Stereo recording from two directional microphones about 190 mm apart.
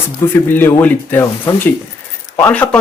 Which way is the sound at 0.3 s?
10° left (ahead or behind).